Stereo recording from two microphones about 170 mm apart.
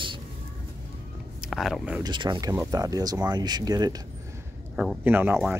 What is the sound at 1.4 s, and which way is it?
Speech, centre (ahead or behind).